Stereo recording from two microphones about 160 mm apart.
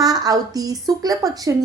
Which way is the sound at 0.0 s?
25° right (ahead or behind).